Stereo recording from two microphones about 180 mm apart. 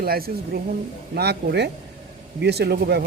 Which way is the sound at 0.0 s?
55° right (ahead or behind).